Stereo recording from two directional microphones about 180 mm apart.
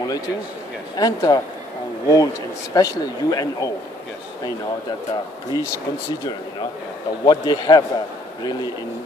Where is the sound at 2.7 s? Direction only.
20° left (ahead or behind).